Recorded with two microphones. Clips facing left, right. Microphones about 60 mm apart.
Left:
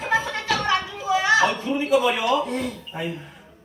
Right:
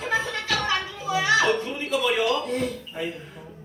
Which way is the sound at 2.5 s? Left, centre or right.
Left.